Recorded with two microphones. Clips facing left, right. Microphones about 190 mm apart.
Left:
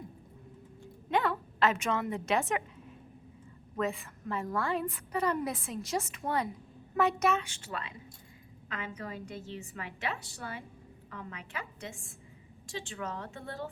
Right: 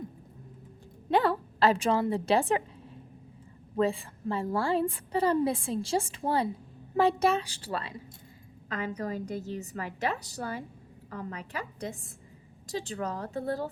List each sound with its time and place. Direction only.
1.1 s a woman's voice: 35° right (ahead or behind)
3.8 s a woman's voice: 30° right (ahead or behind)